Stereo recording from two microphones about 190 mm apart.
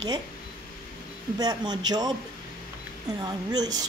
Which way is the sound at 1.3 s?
20° right (ahead or behind).